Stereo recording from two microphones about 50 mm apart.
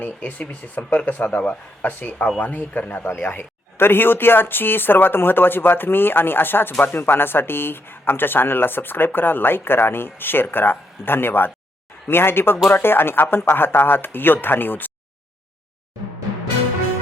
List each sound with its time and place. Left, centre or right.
0.0 s speech: left
1.8 s a man's voice: left